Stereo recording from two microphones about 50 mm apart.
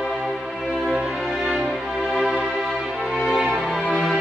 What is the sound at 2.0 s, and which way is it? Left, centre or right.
Music, centre.